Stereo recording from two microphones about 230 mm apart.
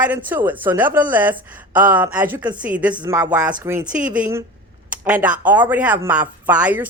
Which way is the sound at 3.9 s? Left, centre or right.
Right.